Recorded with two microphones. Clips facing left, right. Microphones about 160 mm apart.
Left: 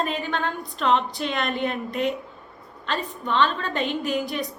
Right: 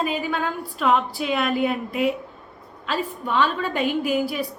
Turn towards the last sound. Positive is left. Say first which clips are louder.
# right 3 dB
turn(degrees=-5)  # may be behind; listen again after turning